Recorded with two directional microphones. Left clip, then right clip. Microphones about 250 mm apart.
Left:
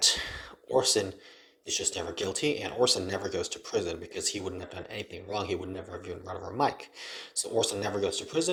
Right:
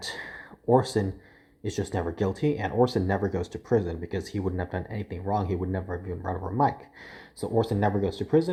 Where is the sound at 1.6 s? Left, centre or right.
Left.